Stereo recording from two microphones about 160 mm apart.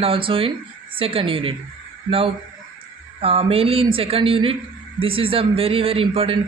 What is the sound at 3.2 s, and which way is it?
Speech, 40° right (ahead or behind).